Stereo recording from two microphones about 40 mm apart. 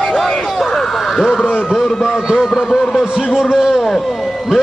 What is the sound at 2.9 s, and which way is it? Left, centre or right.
Speech, centre.